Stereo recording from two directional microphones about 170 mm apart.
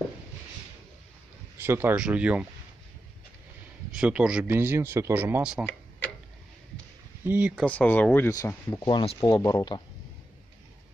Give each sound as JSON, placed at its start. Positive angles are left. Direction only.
{"t": 1.6, "sound": "speech", "side_deg": -15}
{"t": 3.9, "sound": "speech", "side_deg": -5}
{"t": 7.2, "sound": "speech", "side_deg": -10}
{"t": 7.6, "sound": "speech", "side_deg": 10}
{"t": 8.8, "sound": "speech", "side_deg": 30}
{"t": 9.3, "sound": "speech", "side_deg": 20}